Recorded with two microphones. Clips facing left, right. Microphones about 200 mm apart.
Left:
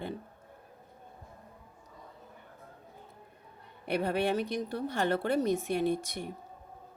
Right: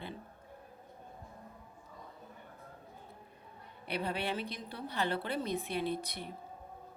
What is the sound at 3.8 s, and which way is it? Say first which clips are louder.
Speech: left 7 dB; 50° left (ahead or behind).